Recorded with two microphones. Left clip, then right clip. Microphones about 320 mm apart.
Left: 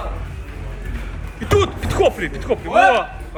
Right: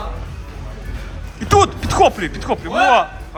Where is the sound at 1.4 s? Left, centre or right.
Centre.